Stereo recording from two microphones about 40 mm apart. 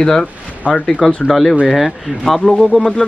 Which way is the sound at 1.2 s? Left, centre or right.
Centre.